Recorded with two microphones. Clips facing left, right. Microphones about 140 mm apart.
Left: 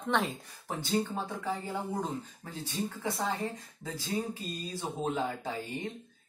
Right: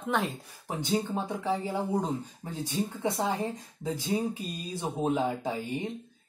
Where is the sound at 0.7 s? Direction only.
15° right (ahead or behind).